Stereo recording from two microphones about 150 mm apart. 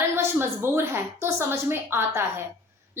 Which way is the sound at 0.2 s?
15° right (ahead or behind).